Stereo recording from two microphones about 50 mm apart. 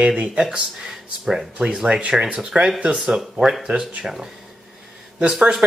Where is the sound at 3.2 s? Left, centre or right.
Centre.